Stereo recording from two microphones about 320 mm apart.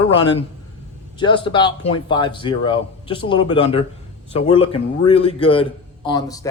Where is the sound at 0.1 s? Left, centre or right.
Centre.